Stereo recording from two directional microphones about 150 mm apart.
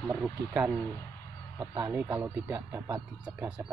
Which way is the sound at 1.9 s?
10° right (ahead or behind).